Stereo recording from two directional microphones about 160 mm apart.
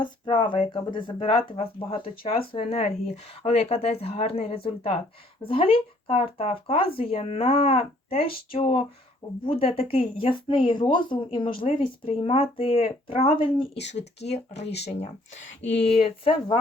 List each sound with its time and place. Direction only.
0.0 s speech: 30° left (ahead or behind)
14.6 s speech: 90° left
14.8 s speech: 40° left (ahead or behind)